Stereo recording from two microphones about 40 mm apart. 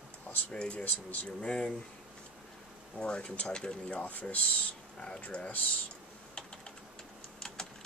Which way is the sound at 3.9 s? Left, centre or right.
Left.